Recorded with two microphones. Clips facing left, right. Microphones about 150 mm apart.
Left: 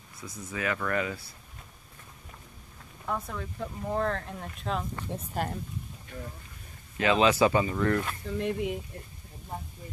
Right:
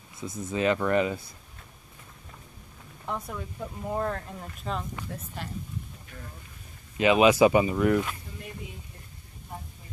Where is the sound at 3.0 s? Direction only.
15° right (ahead or behind).